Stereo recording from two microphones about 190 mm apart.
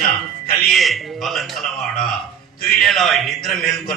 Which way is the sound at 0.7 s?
Centre (ahead or behind).